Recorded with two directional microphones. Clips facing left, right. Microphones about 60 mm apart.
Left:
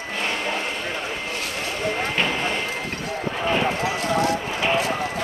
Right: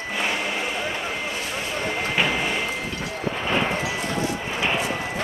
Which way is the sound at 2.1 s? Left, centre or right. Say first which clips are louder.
Even; centre.